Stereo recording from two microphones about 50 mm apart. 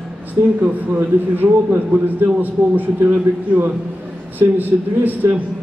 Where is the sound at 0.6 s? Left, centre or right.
Right.